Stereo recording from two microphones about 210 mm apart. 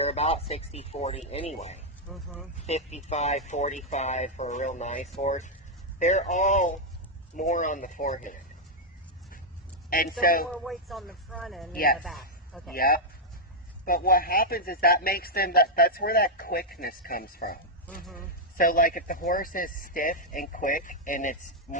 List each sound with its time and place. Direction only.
0.0 s speech: 30° left (ahead or behind)
2.0 s speech: centre (ahead or behind)
2.6 s speech: 30° left (ahead or behind)
9.9 s a man's voice: 40° left (ahead or behind)
10.5 s speech: centre (ahead or behind)
12.7 s a man's voice: 45° left (ahead or behind)